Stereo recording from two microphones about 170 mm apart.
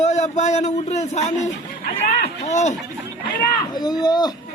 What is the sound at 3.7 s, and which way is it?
Speech, 25° left (ahead or behind).